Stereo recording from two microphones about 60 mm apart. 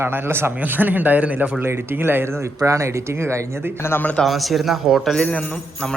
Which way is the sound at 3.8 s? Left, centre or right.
Left.